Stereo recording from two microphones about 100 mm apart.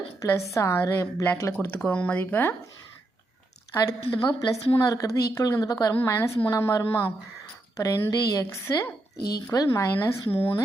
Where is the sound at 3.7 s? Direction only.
35° left (ahead or behind).